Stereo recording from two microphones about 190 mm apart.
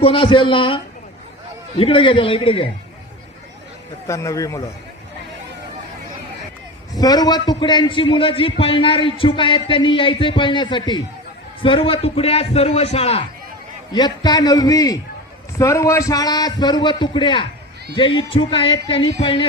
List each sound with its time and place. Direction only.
0.0 s a man's voice: 30° left (ahead or behind)
1.8 s a man's voice: 30° left (ahead or behind)
4.0 s a man's voice: 15° left (ahead or behind)
6.9 s a man's voice: 20° left (ahead or behind)